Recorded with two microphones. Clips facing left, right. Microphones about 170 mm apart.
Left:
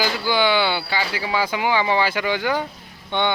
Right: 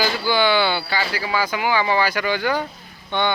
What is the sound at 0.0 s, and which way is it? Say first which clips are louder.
Speech: right 1 dB; 15° left (ahead or behind).